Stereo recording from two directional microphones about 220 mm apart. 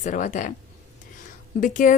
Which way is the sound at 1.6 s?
35° left (ahead or behind).